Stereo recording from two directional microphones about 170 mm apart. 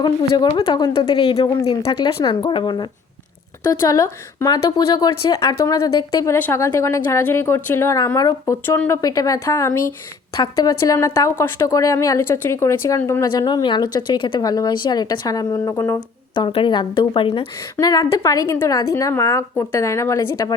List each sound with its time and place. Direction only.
0.4 s a woman's voice: 25° left (ahead or behind)